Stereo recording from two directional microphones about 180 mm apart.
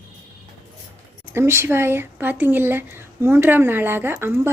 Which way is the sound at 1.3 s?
15° right (ahead or behind).